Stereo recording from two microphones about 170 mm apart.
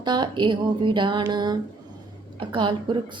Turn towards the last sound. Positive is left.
turn(degrees=-30)  # may be behind; listen again after turning